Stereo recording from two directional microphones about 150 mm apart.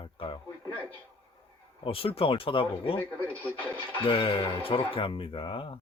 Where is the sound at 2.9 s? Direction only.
10° left (ahead or behind).